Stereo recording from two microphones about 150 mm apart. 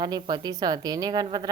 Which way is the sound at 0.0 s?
30° right (ahead or behind).